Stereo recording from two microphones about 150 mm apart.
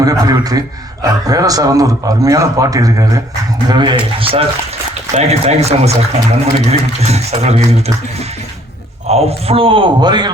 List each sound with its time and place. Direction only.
0.0 s a man's voice: 25° right (ahead or behind); by 7.9 s 45° right (ahead or behind)
9.0 s a man's voice: 40° right (ahead or behind)